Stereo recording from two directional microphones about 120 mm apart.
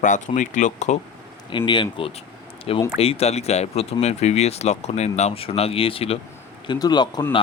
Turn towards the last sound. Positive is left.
turn(degrees=35)  # may be behind; listen again after turning